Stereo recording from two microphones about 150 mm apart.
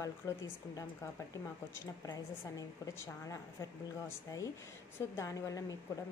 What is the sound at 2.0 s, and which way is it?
A woman's voice, 25° left (ahead or behind).